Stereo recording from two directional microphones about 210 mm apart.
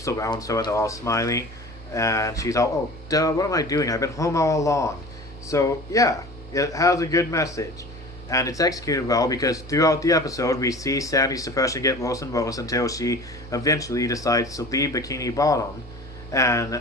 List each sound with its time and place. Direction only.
0.0 s speech: 15° left (ahead or behind)